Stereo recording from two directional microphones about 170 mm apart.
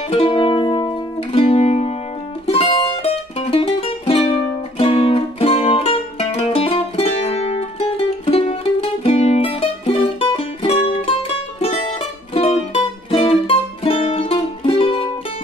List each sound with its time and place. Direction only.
0.1 s music: 30° left (ahead or behind)